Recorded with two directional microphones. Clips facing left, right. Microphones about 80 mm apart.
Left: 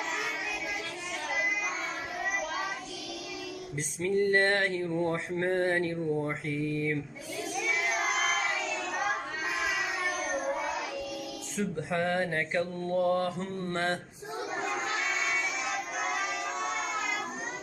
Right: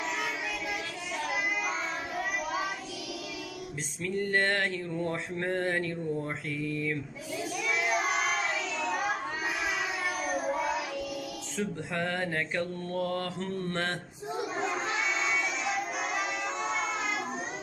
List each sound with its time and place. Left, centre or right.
4.0 s mantra: left
11.9 s mantra: left